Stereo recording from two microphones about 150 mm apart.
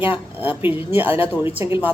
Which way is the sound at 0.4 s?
10° right (ahead or behind).